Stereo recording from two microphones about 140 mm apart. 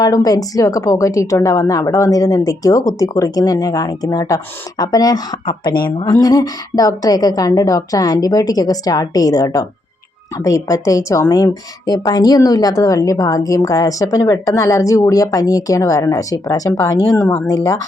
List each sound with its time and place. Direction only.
0.0 s a woman's voice: 25° left (ahead or behind)